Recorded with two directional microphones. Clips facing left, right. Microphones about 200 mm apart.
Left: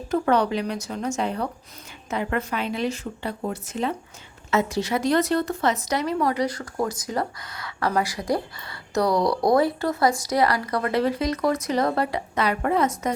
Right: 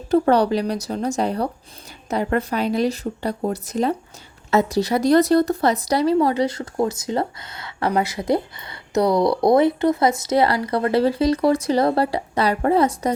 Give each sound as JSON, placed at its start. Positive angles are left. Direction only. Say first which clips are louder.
{"t": 0.1, "sound": "a woman's voice", "louder": "right 5 dB", "side_deg": -35}